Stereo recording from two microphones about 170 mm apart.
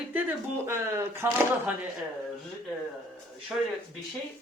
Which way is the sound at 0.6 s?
15° right (ahead or behind).